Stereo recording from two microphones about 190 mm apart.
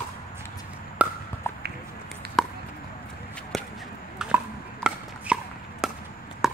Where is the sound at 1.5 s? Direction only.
10° left (ahead or behind).